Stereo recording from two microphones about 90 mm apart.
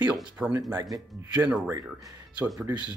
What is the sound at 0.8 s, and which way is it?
A man's voice, 40° right (ahead or behind).